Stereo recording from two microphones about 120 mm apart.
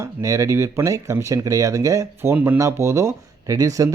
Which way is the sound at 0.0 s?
25° right (ahead or behind).